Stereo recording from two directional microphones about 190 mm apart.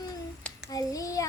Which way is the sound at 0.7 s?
20° left (ahead or behind).